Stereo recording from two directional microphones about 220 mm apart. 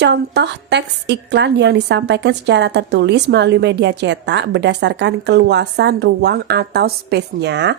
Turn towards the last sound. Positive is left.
turn(degrees=-50)  # may be behind; listen again after turning